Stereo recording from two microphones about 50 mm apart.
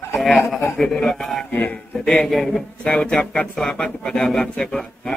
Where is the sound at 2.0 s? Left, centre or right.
Centre.